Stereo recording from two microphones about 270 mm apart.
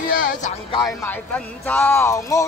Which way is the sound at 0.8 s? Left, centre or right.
Centre.